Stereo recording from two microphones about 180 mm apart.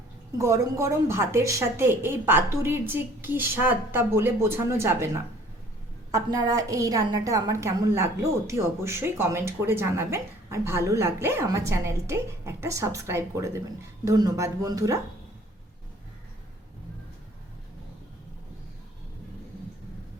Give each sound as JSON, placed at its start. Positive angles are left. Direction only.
{"t": 0.3, "sound": "a woman's voice", "side_deg": -15}